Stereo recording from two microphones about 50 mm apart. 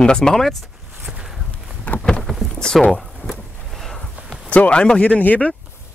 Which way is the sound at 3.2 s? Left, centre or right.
Centre.